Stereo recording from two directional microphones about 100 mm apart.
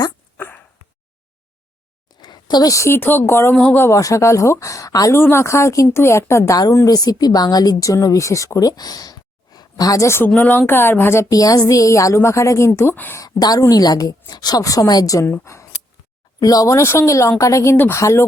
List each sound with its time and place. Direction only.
0.3 s a sound: 25° left (ahead or behind)
2.0 s speech: 45° left (ahead or behind); by 3.8 s 15° left (ahead or behind)
3.8 s speech: 35° left (ahead or behind)
5.1 s speech: 25° left (ahead or behind)
6.7 s speech: 40° left (ahead or behind); by 13.2 s 20° left (ahead or behind)
13.2 s speech: 40° left (ahead or behind)